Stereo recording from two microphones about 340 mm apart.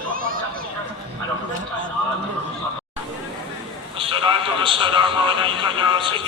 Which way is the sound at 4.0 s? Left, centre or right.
Centre.